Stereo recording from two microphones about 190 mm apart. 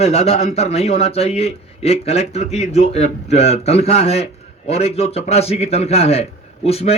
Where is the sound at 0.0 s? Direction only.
30° left (ahead or behind).